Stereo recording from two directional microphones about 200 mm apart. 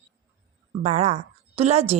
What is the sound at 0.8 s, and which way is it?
A woman's voice, 35° right (ahead or behind).